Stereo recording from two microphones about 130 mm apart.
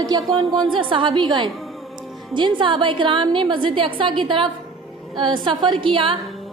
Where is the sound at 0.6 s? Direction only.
40° right (ahead or behind).